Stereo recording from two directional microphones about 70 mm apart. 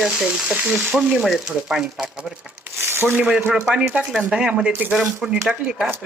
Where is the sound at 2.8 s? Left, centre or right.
Right.